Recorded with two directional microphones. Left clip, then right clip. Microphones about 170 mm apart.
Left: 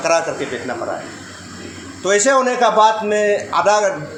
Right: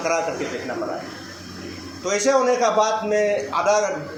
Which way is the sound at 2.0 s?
45° left (ahead or behind).